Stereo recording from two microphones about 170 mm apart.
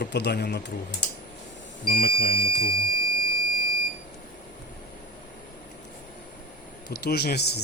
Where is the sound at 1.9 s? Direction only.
65° left (ahead or behind).